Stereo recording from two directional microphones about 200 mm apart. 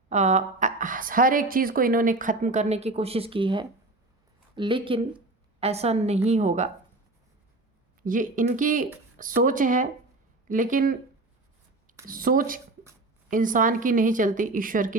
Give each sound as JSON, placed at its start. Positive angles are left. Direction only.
{"t": 0.1, "sound": "a woman's voice", "side_deg": -35}
{"t": 8.0, "sound": "a woman's voice", "side_deg": -40}
{"t": 12.0, "sound": "a woman's voice", "side_deg": -45}